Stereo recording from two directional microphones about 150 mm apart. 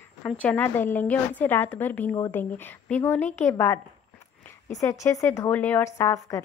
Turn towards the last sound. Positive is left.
turn(degrees=20)  # may be behind; listen again after turning